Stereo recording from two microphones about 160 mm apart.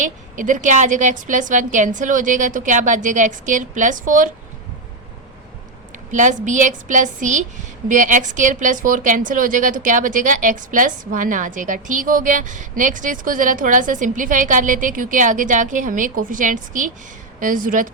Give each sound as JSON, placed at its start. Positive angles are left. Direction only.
{"t": 0.0, "sound": "a woman's voice", "side_deg": -55}
{"t": 6.1, "sound": "a woman's voice", "side_deg": -50}